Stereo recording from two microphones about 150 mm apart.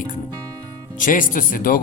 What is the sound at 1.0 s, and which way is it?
Speech, 65° left (ahead or behind).